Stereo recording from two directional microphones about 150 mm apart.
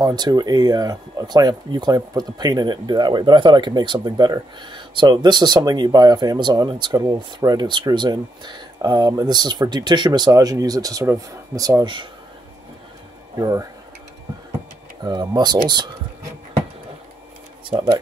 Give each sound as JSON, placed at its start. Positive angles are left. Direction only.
{"t": 0.0, "sound": "speech", "side_deg": -30}
{"t": 13.4, "sound": "speech", "side_deg": -20}
{"t": 15.0, "sound": "speech", "side_deg": -30}
{"t": 17.6, "sound": "speech", "side_deg": -35}